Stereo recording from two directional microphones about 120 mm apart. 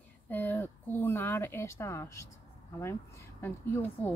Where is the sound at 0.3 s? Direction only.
15° left (ahead or behind).